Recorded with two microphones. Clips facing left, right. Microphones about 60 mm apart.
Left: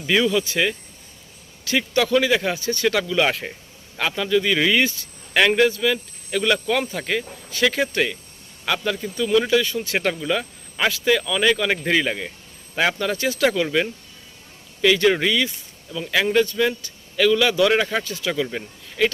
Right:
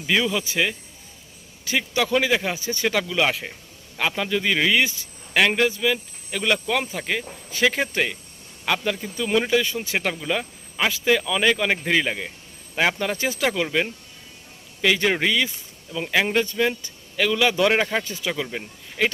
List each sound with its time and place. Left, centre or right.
0.3 s speech: centre
3.0 s speech: centre
4.1 s speech: centre
7.5 s speech: centre
10.0 s speech: centre
13.4 s a man's voice: centre; by 18.3 s right
18.5 s speech: centre